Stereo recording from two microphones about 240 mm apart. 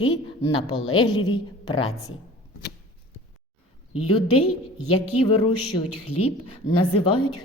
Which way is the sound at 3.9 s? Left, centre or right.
Left.